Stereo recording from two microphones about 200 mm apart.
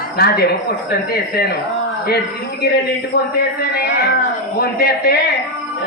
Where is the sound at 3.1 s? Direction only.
55° left (ahead or behind).